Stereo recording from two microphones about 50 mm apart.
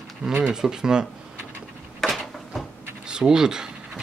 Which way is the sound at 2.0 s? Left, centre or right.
Centre.